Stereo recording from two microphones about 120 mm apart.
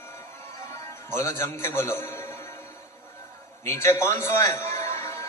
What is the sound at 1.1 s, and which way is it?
A man's voice, 20° left (ahead or behind).